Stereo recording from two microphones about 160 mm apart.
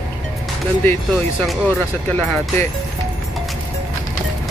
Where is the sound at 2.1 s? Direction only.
10° left (ahead or behind).